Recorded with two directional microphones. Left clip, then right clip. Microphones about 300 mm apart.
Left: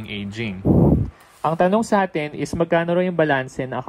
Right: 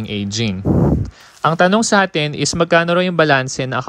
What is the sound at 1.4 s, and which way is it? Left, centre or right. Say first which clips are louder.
Speech: right 5 dB; left.